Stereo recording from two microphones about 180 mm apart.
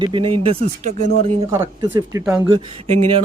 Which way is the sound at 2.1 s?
20° right (ahead or behind).